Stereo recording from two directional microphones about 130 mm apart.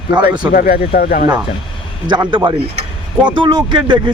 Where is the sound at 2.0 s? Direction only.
35° right (ahead or behind).